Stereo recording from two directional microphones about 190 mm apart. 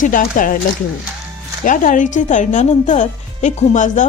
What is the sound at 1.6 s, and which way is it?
Speech, 45° left (ahead or behind).